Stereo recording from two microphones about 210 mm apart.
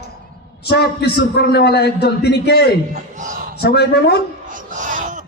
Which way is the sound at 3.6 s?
50° left (ahead or behind).